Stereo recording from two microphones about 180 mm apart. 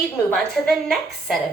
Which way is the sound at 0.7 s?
Centre (ahead or behind).